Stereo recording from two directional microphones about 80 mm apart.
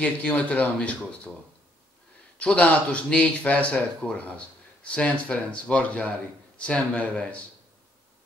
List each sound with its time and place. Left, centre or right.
0.0 s speech: centre